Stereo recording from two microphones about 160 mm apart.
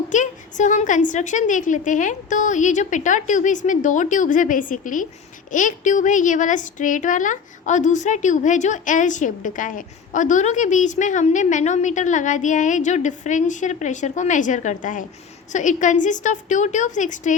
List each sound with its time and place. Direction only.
0.1 s a woman's voice: 50° left (ahead or behind)